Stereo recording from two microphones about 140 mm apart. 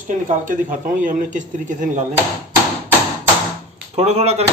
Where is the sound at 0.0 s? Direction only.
70° right (ahead or behind).